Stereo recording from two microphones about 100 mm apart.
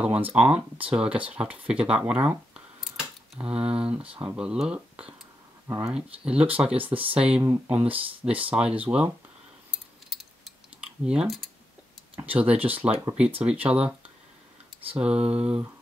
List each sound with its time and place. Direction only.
0.0 s speech: 15° right (ahead or behind)
7.4 s speech: 25° right (ahead or behind)
7.7 s speech: 15° right (ahead or behind)
10.1 s keys jangling: 5° right (ahead or behind)
12.2 s speech: 15° right (ahead or behind)
15.0 s speech: 10° right (ahead or behind)